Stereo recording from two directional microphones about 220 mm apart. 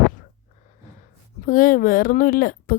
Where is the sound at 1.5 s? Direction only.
40° left (ahead or behind).